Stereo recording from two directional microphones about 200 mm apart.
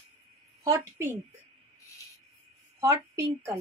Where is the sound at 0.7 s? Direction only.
10° right (ahead or behind).